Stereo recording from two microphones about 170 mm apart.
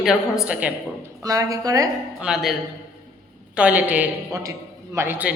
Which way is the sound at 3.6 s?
10° right (ahead or behind).